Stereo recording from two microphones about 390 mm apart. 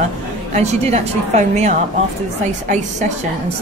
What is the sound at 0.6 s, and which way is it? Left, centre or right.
Speech, centre.